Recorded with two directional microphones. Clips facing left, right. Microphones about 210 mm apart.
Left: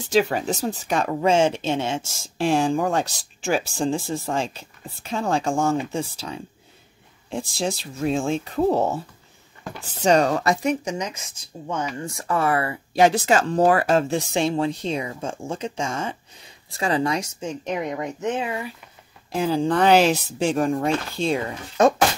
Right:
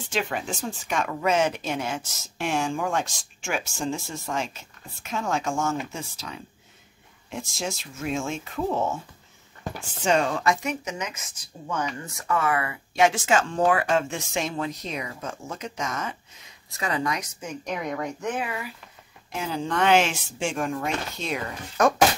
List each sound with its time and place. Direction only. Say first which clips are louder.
0.1 s speech: left 8 dB; 40° left (ahead or behind)